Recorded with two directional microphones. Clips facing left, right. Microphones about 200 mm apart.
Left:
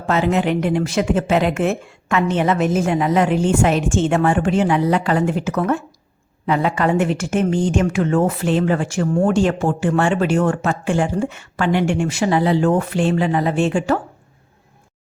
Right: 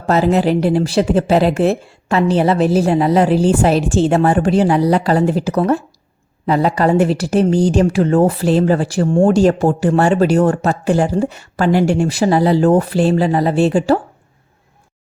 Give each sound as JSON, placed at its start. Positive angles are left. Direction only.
{"t": 0.0, "sound": "a woman's voice", "side_deg": -40}